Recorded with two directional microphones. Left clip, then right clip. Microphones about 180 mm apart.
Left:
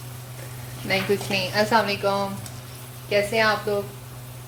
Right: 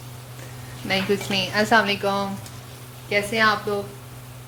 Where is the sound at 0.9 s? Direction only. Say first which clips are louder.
Even; 15° right (ahead or behind).